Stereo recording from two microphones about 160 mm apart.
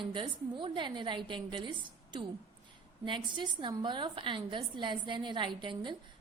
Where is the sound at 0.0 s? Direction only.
30° right (ahead or behind).